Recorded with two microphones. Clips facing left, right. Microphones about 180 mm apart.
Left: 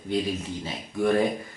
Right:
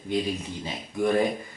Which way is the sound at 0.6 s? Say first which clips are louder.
Left 1 dB; 15° right (ahead or behind).